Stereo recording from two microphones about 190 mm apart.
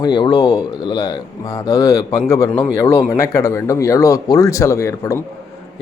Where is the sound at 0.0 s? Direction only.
25° left (ahead or behind).